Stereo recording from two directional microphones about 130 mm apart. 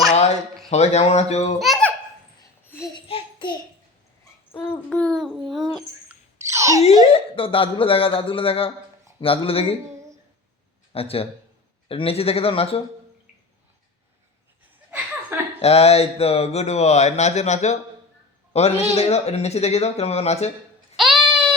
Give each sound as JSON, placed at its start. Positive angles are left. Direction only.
{"t": 0.1, "sound": "a sound", "side_deg": 55}
{"t": 0.7, "sound": "speech", "side_deg": 55}
{"t": 1.5, "sound": "a child's voice", "side_deg": 0}
{"t": 2.6, "sound": "babbling", "side_deg": 20}
{"t": 2.9, "sound": "babbling", "side_deg": 40}
{"t": 4.5, "sound": "child singing", "side_deg": 15}
{"t": 5.0, "sound": "babbling", "side_deg": 0}
{"t": 6.4, "sound": "a sound", "side_deg": -20}
{"t": 7.1, "sound": "a man's voice", "side_deg": 45}
{"t": 10.9, "sound": "a man's voice", "side_deg": 50}
{"t": 15.6, "sound": "speech", "side_deg": 55}
{"t": 20.9, "sound": "a sound", "side_deg": -5}